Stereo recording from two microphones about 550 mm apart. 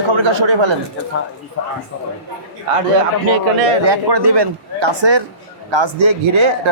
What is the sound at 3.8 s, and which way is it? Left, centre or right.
A man's voice, right.